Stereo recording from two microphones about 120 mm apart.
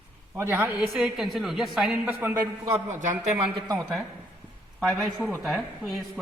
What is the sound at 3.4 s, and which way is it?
Speech, 35° right (ahead or behind).